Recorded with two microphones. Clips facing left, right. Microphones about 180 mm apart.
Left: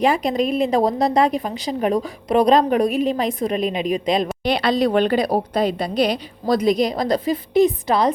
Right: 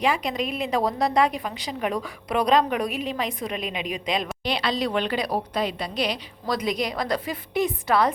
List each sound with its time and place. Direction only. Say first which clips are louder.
0.0 s a woman's voice: left 6 dB; 45° left (ahead or behind)
0.8 s a woman's voice: left 2 dB; 25° left (ahead or behind)
1.2 s a woman's voice: left 5 dB; 40° left (ahead or behind)
4.4 s a woman's voice: left 8 dB; 55° left (ahead or behind)
7.9 s a woman's voice: left 3 dB; 20° left (ahead or behind)